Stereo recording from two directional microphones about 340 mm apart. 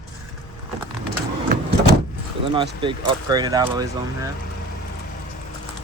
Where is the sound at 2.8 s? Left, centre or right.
Centre.